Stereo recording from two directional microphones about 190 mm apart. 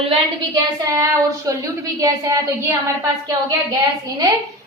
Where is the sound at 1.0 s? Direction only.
15° right (ahead or behind).